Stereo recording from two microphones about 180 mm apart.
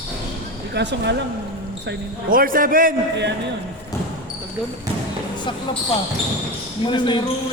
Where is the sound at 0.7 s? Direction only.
70° right (ahead or behind).